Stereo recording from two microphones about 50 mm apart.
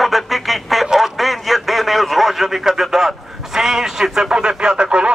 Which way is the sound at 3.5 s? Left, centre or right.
Centre.